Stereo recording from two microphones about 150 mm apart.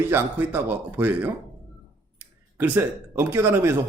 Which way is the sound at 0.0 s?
15° right (ahead or behind).